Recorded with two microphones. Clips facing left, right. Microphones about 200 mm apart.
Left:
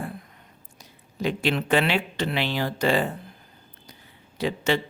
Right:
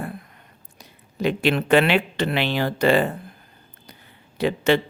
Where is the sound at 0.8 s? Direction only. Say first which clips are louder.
Right 4 dB; 60° right (ahead or behind).